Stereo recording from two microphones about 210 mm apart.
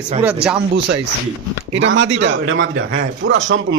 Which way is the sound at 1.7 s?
60° right (ahead or behind).